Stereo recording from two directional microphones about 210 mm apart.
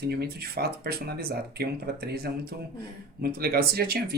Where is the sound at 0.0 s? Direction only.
50° right (ahead or behind).